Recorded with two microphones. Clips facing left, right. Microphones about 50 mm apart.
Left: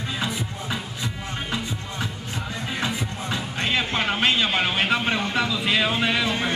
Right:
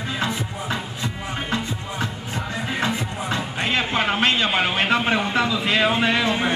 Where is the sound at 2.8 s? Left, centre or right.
Right.